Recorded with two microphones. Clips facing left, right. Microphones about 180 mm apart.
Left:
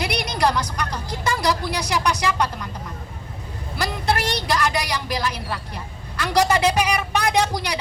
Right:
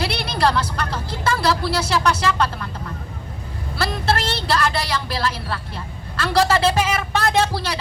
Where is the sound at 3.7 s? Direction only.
15° left (ahead or behind).